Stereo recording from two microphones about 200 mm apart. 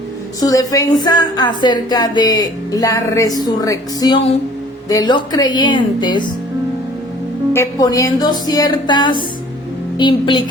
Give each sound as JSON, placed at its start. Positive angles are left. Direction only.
{"t": 0.3, "sound": "a woman's voice", "side_deg": 20}
{"t": 7.5, "sound": "a woman's voice", "side_deg": 15}